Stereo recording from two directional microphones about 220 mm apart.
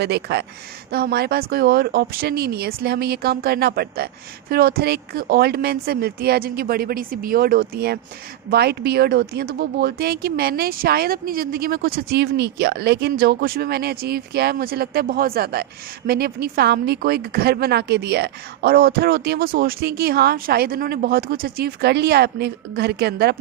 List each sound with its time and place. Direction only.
0.0 s a woman's voice: 50° right (ahead or behind)